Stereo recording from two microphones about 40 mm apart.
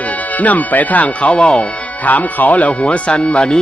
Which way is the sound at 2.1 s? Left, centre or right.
Left.